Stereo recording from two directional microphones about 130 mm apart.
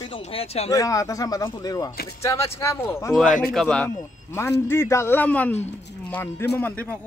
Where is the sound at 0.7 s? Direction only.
25° left (ahead or behind).